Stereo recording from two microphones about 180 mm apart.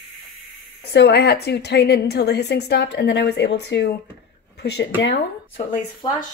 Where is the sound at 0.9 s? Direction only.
65° left (ahead or behind).